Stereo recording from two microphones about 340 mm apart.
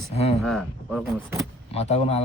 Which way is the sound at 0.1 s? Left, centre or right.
Centre.